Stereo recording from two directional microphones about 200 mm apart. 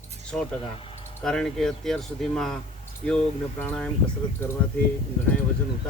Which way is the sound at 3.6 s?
5° left (ahead or behind).